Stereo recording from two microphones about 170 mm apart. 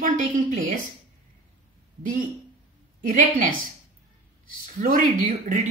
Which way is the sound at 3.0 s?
50° right (ahead or behind).